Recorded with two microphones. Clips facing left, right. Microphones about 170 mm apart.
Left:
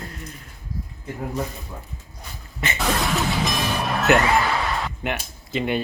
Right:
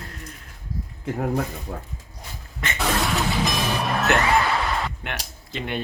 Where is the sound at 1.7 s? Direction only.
65° right (ahead or behind).